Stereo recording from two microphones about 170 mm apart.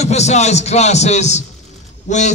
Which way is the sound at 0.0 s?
40° left (ahead or behind).